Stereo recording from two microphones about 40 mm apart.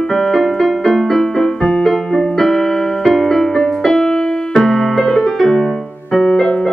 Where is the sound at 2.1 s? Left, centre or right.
Centre.